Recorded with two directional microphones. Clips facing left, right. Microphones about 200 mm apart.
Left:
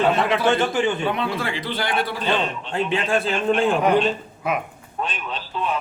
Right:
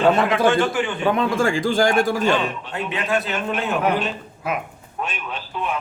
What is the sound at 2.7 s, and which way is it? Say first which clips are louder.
A man's voice: left 3 dB; 30° left (ahead or behind).